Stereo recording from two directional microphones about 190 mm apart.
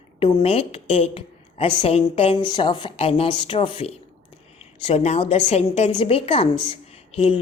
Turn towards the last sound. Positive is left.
turn(degrees=30)  # may be behind; listen again after turning